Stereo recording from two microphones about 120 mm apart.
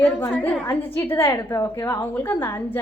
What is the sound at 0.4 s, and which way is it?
A woman's voice, 15° left (ahead or behind).